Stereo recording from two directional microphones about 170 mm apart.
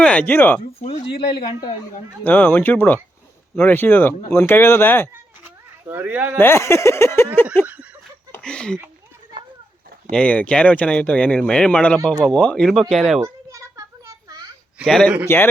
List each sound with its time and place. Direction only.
0.0 s speech: 10° left (ahead or behind)
0.8 s speech: 35° left (ahead or behind)
2.2 s speech: 10° left (ahead or behind)
5.9 s speech: 10° right (ahead or behind)
6.4 s speech: 15° left (ahead or behind)
7.6 s a sound: 5° right (ahead or behind)
8.3 s speech: 5° left (ahead or behind)
10.1 s speech: 5° left (ahead or behind)
13.2 s a sound: 15° right (ahead or behind)
14.8 s speech: centre (ahead or behind)